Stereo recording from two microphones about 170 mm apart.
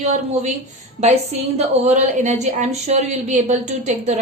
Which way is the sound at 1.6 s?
45° right (ahead or behind).